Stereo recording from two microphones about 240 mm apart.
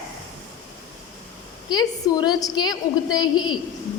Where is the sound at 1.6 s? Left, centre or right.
Centre.